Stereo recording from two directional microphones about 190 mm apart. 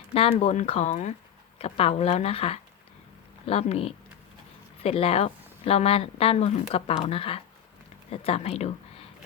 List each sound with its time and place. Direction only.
0.1 s a woman's voice: 30° left (ahead or behind)